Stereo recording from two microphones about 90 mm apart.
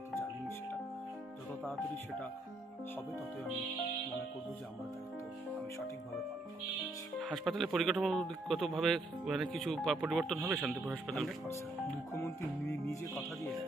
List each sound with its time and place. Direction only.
1.6 s speech: 5° left (ahead or behind)
7.2 s speech: centre (ahead or behind)
10.3 s speech: 15° right (ahead or behind)
11.1 s speech: 5° left (ahead or behind)
12.1 s music: 30° left (ahead or behind)